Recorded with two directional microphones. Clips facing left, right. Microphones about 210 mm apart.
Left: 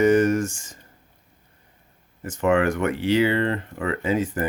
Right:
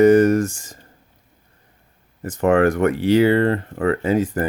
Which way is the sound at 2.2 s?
35° right (ahead or behind).